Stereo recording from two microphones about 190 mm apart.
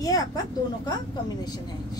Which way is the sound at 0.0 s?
20° left (ahead or behind).